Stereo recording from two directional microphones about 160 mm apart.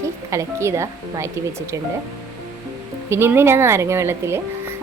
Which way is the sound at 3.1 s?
15° right (ahead or behind).